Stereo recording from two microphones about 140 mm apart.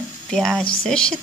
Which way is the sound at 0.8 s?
5° left (ahead or behind).